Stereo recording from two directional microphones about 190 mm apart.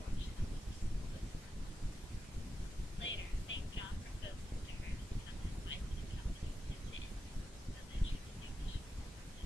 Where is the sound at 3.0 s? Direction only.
80° left.